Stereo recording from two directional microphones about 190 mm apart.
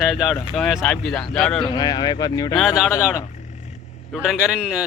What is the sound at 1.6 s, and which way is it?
Speech, 20° left (ahead or behind).